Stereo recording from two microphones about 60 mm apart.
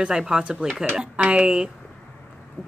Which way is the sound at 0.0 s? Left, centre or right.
Centre.